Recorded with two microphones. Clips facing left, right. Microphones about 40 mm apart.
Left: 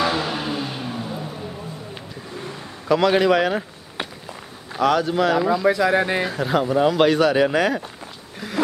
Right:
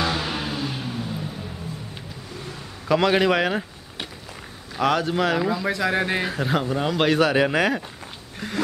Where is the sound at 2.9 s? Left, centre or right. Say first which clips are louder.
Left 2 dB; centre.